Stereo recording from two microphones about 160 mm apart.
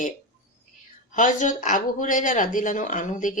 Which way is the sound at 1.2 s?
55° left (ahead or behind).